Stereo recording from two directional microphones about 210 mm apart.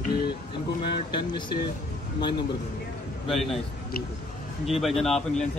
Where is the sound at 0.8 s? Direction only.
20° left (ahead or behind).